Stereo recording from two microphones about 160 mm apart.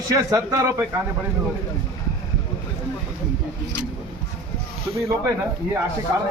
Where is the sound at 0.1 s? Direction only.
20° right (ahead or behind).